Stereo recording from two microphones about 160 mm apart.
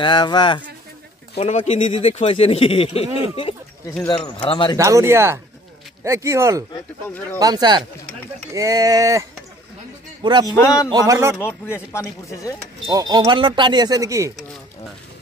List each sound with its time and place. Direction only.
0.0 s speech: 30° left (ahead or behind)
1.4 s speech: 40° left (ahead or behind)
4.7 s speech: 20° right (ahead or behind)
10.4 s speech: 20° left (ahead or behind)
10.9 s speech: 20° right (ahead or behind)
11.3 s speech: 15° left (ahead or behind)
12.8 s speech: 20° right (ahead or behind)